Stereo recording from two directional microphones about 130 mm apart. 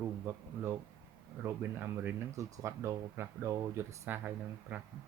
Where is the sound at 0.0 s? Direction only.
15° right (ahead or behind).